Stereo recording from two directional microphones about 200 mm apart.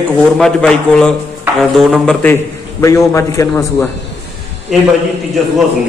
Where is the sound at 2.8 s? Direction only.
15° left (ahead or behind).